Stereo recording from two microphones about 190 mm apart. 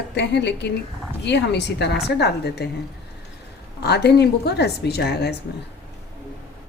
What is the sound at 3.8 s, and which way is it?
A woman's voice, 60° left (ahead or behind).